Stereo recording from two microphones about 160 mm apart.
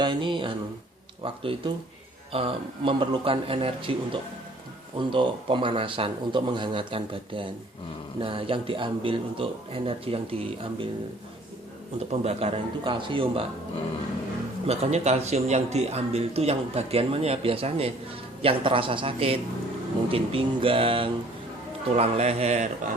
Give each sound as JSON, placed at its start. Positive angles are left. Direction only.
{"t": 0.0, "sound": "a man's voice", "side_deg": -30}
{"t": 12.1, "sound": "a man's voice", "side_deg": -40}
{"t": 14.7, "sound": "a man's voice", "side_deg": -40}